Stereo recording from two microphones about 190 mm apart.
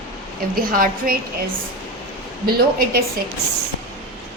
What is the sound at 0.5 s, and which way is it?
Speech, 50° right (ahead or behind).